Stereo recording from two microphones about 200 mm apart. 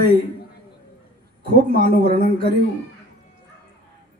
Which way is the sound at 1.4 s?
50° right (ahead or behind).